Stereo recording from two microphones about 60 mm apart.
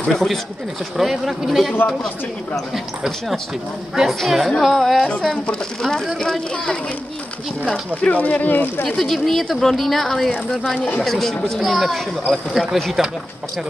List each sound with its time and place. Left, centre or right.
0.0 s speech: centre
8.0 s speech: left
8.8 s speech: centre